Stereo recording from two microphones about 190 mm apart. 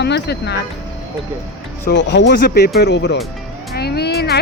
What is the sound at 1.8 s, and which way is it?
Speech, 65° left (ahead or behind).